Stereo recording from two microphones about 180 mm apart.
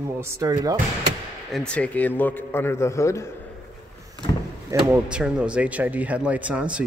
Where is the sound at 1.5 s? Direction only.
5° left (ahead or behind).